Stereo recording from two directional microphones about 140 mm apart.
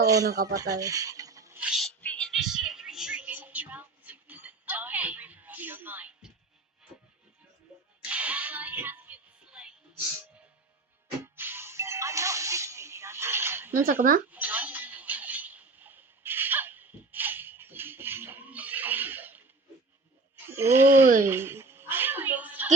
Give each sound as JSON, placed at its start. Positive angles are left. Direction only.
{"t": 0.0, "sound": "speech", "side_deg": -25}
{"t": 1.5, "sound": "speech", "side_deg": -5}
{"t": 2.0, "sound": "music", "side_deg": 10}
{"t": 8.0, "sound": "music", "side_deg": -10}
{"t": 11.2, "sound": "music", "side_deg": -15}
{"t": 14.3, "sound": "a sound", "side_deg": -10}
{"t": 20.5, "sound": "speech", "side_deg": -15}
{"t": 21.2, "sound": "a sound", "side_deg": -15}